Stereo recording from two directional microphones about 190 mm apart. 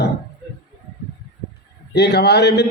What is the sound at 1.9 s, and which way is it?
Speech, 60° left (ahead or behind).